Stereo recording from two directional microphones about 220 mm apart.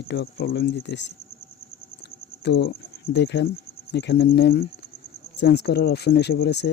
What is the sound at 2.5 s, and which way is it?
Speech, 50° left (ahead or behind).